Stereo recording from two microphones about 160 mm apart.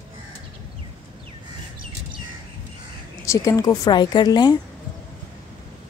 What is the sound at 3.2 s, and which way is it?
A woman's voice, 20° left (ahead or behind).